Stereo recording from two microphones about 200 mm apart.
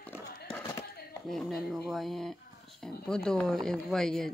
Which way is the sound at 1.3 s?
Centre (ahead or behind).